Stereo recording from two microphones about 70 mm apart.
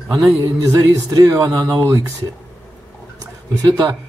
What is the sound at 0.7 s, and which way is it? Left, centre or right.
A man's voice, right.